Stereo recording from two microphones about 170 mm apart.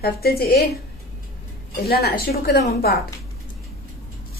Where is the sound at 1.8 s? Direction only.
65° left (ahead or behind).